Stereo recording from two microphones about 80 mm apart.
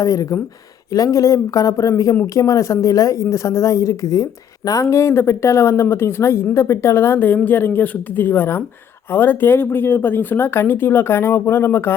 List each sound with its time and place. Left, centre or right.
0.0 s speech: left